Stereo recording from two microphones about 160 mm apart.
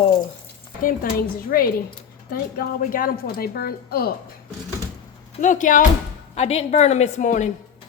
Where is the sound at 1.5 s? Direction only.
65° left (ahead or behind).